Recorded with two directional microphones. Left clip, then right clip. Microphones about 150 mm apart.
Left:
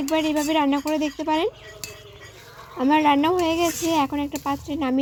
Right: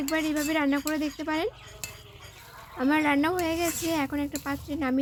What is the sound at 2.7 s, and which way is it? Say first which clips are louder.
Speech: left 6 dB; 5° left (ahead or behind).